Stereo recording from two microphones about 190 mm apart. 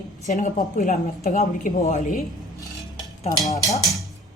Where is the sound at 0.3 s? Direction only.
40° left (ahead or behind).